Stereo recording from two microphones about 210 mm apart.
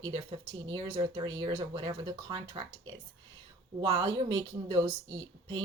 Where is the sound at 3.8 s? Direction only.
20° right (ahead or behind).